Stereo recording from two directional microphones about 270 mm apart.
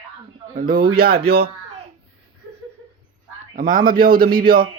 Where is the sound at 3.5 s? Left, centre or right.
Right.